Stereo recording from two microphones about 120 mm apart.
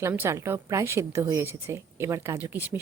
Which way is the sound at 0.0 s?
20° right (ahead or behind).